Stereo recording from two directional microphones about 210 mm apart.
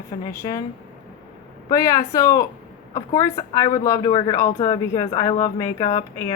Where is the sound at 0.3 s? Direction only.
15° left (ahead or behind).